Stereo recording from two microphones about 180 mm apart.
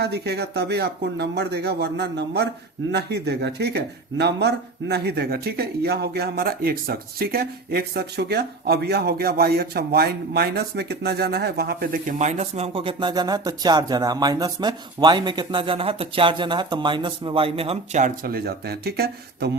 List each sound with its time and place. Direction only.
0.0 s speech: 65° right (ahead or behind)